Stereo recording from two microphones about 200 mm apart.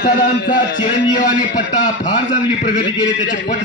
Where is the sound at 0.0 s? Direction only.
45° left (ahead or behind).